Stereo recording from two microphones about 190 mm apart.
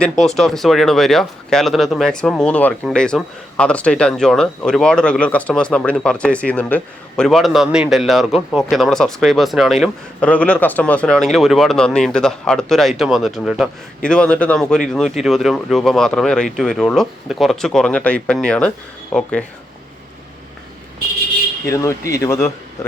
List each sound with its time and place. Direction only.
0.0 s speech: centre (ahead or behind)
21.7 s speech: 15° left (ahead or behind)